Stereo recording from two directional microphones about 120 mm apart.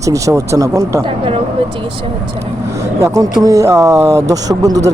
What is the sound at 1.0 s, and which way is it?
Speech, 45° right (ahead or behind).